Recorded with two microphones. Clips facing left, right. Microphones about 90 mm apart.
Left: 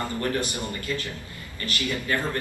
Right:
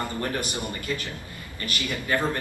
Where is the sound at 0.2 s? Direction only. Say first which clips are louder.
Left 2 dB; 20° right (ahead or behind).